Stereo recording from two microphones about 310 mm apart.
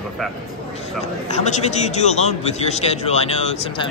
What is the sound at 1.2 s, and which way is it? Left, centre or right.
A man's voice, left.